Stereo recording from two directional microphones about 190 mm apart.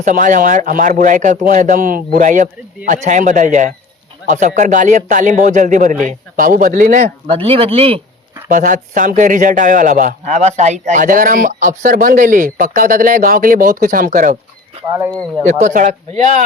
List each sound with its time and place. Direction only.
0.0 s a man's voice: 45° right (ahead or behind)
7.3 s speech: 30° right (ahead or behind)
8.4 s a man's voice: 45° right (ahead or behind)
15.4 s speech: 40° right (ahead or behind)